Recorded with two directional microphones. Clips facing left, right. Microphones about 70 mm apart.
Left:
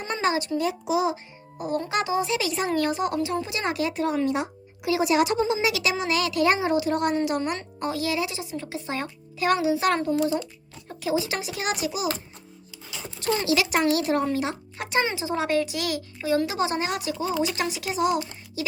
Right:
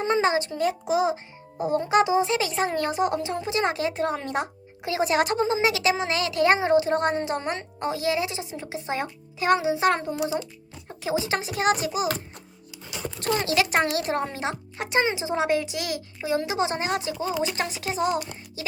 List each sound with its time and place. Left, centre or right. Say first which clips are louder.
0.0 s speech: right 3 dB; right
1.1 s a child's voice: right 3 dB; right
2.3 s a child's voice: even; right
13.1 s a child's voice: even; right